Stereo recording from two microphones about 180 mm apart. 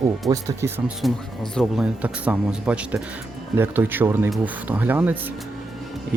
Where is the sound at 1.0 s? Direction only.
Centre (ahead or behind).